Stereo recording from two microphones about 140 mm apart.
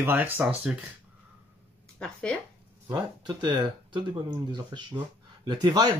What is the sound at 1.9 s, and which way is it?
Speech, 5° left (ahead or behind).